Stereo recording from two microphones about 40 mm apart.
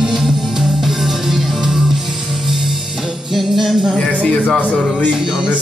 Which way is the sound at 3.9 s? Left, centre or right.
Left.